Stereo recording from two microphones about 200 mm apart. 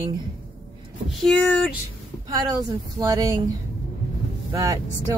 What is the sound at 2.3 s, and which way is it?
Speech, 20° right (ahead or behind).